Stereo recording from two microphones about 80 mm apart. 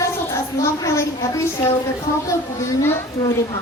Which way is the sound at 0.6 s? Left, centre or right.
Left.